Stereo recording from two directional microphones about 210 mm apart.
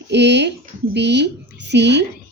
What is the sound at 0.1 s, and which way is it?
A woman's voice, 55° right (ahead or behind).